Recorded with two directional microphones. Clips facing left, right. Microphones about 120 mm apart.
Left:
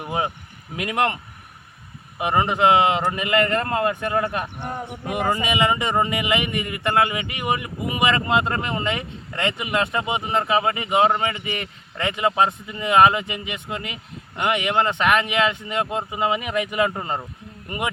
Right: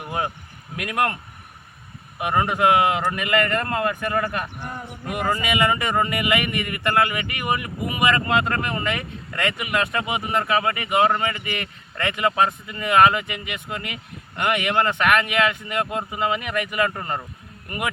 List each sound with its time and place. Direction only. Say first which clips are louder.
0.0 s vehicle: left 2 dB; 20° left (ahead or behind)
0.8 s speech: left 1 dB; 25° left (ahead or behind)